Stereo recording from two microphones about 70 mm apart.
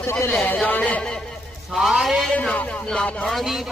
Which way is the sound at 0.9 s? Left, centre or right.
Centre.